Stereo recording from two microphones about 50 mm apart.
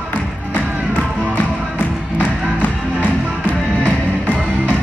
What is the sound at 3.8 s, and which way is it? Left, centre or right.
Music, left.